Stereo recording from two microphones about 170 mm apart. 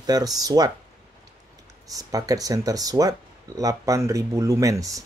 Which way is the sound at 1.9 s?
20° right (ahead or behind).